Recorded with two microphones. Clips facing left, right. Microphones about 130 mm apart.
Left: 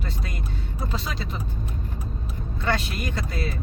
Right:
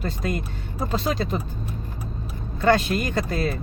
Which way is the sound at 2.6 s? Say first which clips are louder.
Right 8 dB; 45° right (ahead or behind).